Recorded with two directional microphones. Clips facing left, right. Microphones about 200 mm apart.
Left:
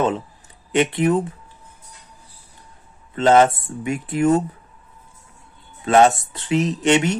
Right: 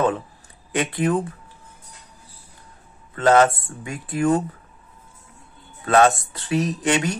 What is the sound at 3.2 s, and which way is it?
Speech, 25° left (ahead or behind).